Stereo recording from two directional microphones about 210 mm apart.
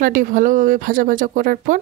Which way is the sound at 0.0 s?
40° right (ahead or behind).